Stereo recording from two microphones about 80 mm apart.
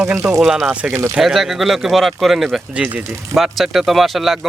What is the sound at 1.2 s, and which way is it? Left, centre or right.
Speech, centre.